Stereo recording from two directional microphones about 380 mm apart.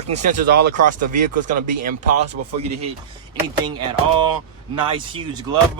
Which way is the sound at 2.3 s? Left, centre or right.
Centre.